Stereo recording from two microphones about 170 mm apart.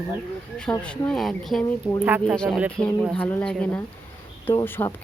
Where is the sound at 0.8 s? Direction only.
5° left (ahead or behind).